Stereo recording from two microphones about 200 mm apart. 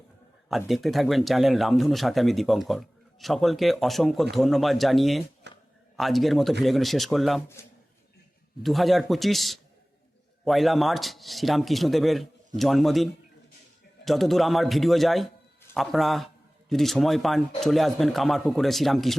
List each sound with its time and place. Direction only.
0.4 s speech: centre (ahead or behind)
5.5 s a sound: 60° right (ahead or behind)
6.0 s speech: centre (ahead or behind)
8.6 s a man's voice: centre (ahead or behind)